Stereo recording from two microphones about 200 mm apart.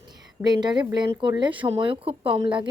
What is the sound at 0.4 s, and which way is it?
A woman's voice, 20° right (ahead or behind).